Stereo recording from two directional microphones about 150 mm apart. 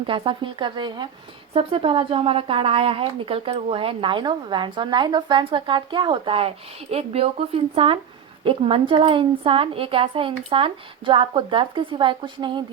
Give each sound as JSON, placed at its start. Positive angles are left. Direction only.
{"t": 0.0, "sound": "a woman's voice", "side_deg": -35}